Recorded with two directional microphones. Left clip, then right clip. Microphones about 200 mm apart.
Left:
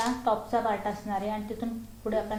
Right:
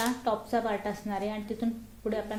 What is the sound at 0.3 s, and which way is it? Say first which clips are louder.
A woman's voice: left 3 dB; 50° right (ahead or behind).